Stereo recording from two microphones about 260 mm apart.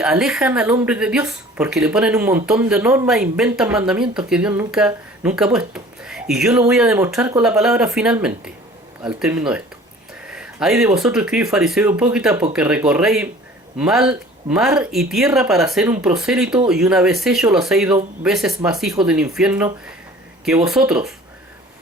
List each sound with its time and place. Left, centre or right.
0.0 s speech: centre